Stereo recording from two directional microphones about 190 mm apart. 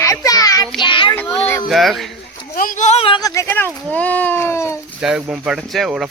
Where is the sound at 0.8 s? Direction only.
25° left (ahead or behind).